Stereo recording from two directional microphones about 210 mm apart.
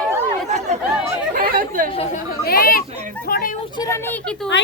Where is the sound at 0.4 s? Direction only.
35° right (ahead or behind).